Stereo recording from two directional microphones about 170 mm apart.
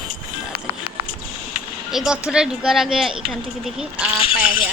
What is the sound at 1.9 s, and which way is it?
Speech, 5° right (ahead or behind).